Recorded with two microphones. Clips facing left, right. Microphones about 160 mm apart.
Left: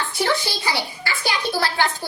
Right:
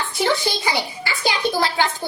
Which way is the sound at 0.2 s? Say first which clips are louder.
Right 2 dB; 20° right (ahead or behind).